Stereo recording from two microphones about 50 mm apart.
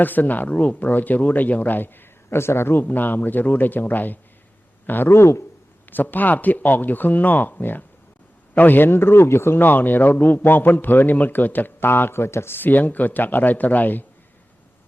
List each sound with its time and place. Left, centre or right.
0.0 s speech: left
2.3 s speech: left
2.8 s a man's voice: left
5.1 s speech: left
5.9 s a man's voice: left
12.5 s speech: left